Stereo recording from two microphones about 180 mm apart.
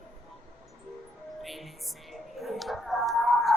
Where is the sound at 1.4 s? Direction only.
Centre (ahead or behind).